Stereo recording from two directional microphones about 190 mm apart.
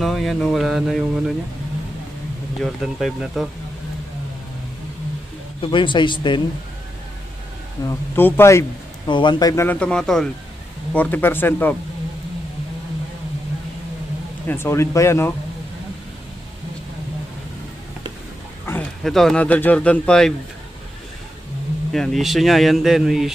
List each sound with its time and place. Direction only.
0.0 s speech: centre (ahead or behind)
2.6 s speech: centre (ahead or behind)
5.6 s speech: 25° left (ahead or behind)
7.8 s a man's voice: 15° left (ahead or behind)
14.5 s a man's voice: 15° left (ahead or behind)
18.7 s speech: 5° left (ahead or behind)
21.9 s speech: centre (ahead or behind)